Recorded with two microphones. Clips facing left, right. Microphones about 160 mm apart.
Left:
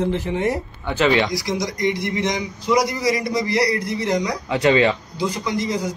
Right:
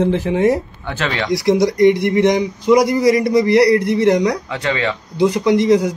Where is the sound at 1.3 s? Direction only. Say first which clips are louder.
Right 10 dB; 60° right (ahead or behind).